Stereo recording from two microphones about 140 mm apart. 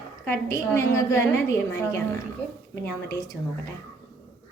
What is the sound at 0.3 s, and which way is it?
Speech, 20° left (ahead or behind).